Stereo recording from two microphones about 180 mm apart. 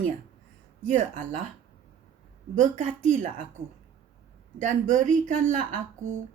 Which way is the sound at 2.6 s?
45° right (ahead or behind).